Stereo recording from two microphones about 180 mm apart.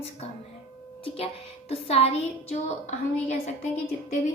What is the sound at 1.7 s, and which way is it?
A woman's voice, 35° left (ahead or behind).